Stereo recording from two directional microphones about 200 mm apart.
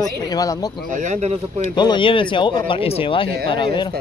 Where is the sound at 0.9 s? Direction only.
40° right (ahead or behind).